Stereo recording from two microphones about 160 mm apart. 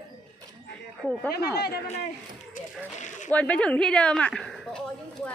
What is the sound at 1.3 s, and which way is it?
Speech, 80° left.